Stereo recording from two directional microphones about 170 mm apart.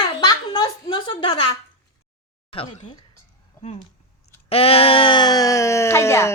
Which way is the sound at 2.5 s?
30° left (ahead or behind).